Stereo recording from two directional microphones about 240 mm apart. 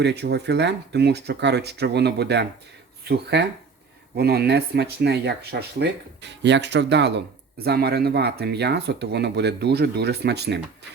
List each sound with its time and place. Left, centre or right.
0.0 s speech: right